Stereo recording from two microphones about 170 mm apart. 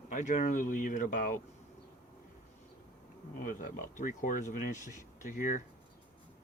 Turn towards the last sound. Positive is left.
turn(degrees=50)  # may be behind; listen again after turning